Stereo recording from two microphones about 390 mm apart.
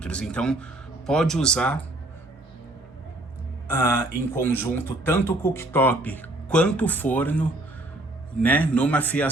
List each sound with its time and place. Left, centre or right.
0.0 s speech: centre
3.8 s speech: centre